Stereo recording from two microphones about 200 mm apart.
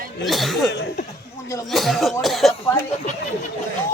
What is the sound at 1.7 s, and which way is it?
Cough, centre (ahead or behind).